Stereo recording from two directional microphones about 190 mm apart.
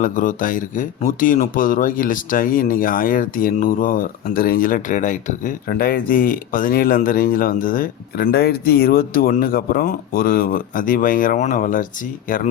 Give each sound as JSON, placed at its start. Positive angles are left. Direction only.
{"t": 0.0, "sound": "speech", "side_deg": 45}